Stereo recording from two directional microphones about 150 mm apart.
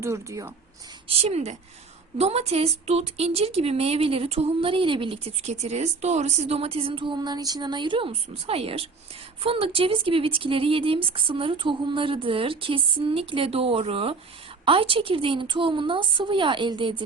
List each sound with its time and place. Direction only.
0.0 s speech: 20° right (ahead or behind)
1.0 s a woman's voice: 40° right (ahead or behind)